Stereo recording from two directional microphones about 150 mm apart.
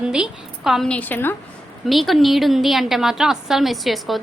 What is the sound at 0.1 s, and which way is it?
A woman's voice, 5° right (ahead or behind).